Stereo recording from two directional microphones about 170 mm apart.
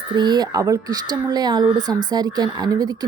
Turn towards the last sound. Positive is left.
turn(degrees=-25)  # may be behind; listen again after turning